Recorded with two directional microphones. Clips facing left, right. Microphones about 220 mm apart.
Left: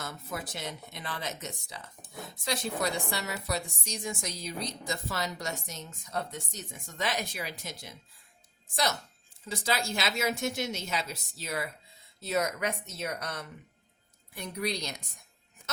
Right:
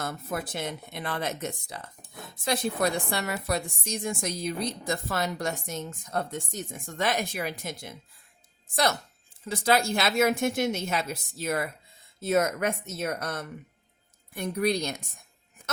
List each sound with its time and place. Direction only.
0.0 s a woman's voice: 55° right (ahead or behind)